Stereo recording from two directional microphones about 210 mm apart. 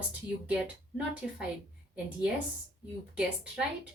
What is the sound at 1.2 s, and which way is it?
A woman's voice, centre (ahead or behind).